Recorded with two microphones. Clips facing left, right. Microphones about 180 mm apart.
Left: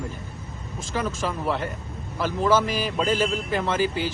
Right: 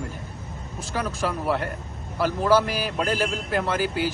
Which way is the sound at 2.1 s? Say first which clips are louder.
Right 1 dB; 5° right (ahead or behind).